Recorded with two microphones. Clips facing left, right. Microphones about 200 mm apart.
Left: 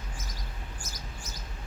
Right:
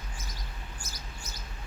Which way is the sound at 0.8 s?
45° left (ahead or behind).